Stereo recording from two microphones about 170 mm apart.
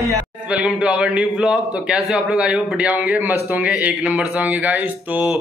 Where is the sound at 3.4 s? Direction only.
10° right (ahead or behind).